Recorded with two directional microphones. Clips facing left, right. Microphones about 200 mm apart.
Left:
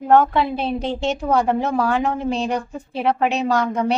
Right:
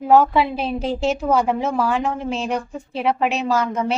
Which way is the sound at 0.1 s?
5° right (ahead or behind).